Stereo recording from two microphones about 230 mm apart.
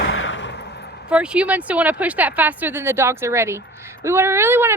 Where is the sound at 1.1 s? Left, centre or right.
Centre.